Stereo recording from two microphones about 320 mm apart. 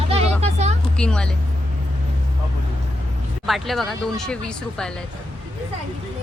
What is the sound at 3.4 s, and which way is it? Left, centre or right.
Speech, centre.